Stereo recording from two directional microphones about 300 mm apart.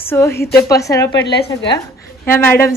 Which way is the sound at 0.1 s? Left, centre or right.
Centre.